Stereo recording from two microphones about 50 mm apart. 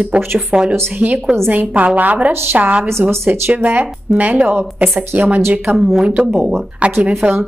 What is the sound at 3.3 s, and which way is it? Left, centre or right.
Speech, right.